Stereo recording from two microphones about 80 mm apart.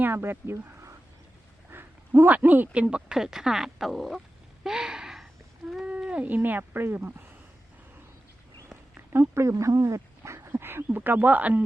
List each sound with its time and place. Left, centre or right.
0.0 s speech: right; by 4.2 s centre
4.6 s a sound: centre
5.8 s speech: centre
9.0 s speech: right